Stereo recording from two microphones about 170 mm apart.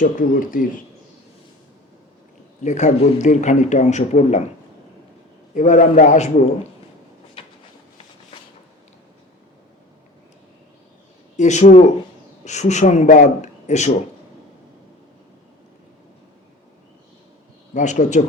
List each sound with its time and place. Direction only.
0.0 s speech: 50° left (ahead or behind)
2.6 s speech: 45° left (ahead or behind)
5.5 s speech: 45° left (ahead or behind)
11.3 s speech: 45° left (ahead or behind)
17.7 s speech: 45° left (ahead or behind)